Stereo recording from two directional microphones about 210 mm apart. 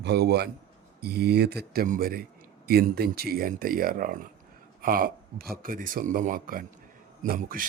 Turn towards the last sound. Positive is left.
turn(degrees=-40)  # may be behind; listen again after turning